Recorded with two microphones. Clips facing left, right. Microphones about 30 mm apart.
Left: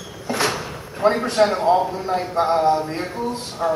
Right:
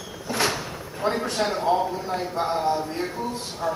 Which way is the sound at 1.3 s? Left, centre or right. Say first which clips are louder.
Left 5 dB; centre.